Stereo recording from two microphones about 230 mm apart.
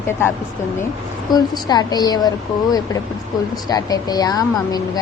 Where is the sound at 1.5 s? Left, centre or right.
Centre.